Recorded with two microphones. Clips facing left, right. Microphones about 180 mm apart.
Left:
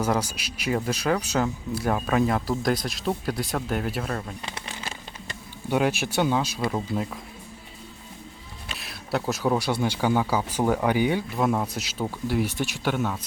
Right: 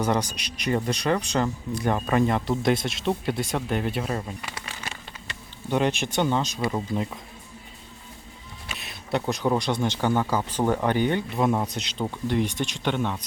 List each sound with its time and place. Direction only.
0.0 s speech: 5° left (ahead or behind)
4.1 s speech: 10° right (ahead or behind)
4.4 s a sound: 25° left (ahead or behind)
5.6 s speech: 5° left (ahead or behind)
8.7 s speech: centre (ahead or behind)